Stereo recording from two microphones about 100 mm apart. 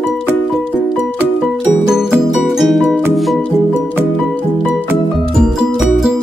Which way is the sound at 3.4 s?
15° left (ahead or behind).